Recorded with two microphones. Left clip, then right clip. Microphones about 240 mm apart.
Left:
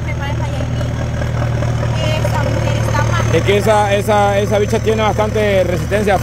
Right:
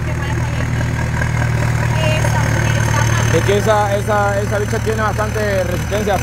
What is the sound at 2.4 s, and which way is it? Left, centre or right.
Vehicle, right.